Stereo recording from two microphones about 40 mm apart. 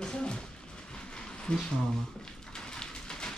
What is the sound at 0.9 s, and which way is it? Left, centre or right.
Train, left.